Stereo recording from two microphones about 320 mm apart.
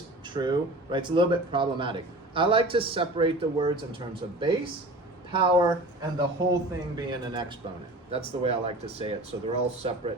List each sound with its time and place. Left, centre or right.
0.3 s speech: centre